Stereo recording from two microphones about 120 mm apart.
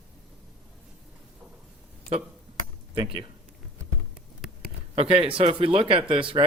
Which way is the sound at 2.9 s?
45° right (ahead or behind).